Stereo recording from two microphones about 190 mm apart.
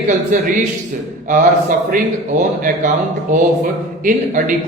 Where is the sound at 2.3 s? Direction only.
45° right (ahead or behind).